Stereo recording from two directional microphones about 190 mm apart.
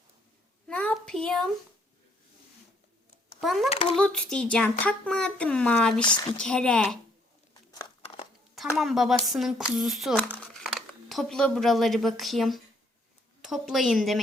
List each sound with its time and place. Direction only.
0.7 s a sound: 5° left (ahead or behind)
3.4 s speech: centre (ahead or behind)
3.7 s a child's voice: 30° left (ahead or behind)
3.9 s speech: 5° left (ahead or behind)
8.0 s a sound: 30° left (ahead or behind)
8.5 s speech: centre (ahead or behind)